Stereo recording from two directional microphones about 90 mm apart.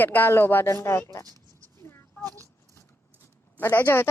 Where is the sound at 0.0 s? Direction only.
20° left (ahead or behind).